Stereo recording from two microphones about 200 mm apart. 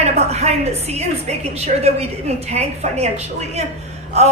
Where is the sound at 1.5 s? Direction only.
30° right (ahead or behind).